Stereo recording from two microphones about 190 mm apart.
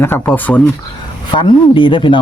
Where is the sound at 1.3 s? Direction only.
25° left (ahead or behind).